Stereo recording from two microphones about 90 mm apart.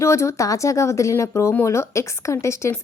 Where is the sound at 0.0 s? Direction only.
35° left (ahead or behind).